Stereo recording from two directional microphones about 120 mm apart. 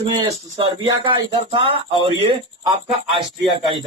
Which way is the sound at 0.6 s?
45° right (ahead or behind).